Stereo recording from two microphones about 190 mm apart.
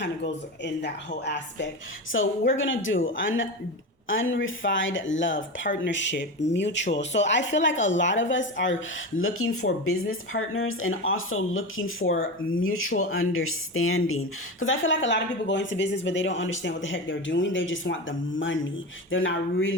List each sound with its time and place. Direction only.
0.6 s speech: 65° left (ahead or behind)
2.1 s a woman's voice: 90° left
5.8 s a woman's voice: 70° left (ahead or behind); by 19.7 s 90° left